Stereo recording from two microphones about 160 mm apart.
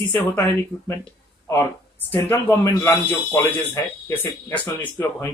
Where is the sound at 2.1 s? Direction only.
15° left (ahead or behind).